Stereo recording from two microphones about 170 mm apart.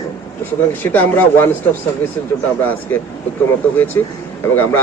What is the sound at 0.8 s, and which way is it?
Speech, 10° left (ahead or behind).